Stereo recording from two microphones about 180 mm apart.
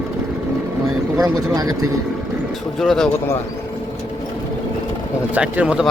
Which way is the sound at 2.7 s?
Centre (ahead or behind).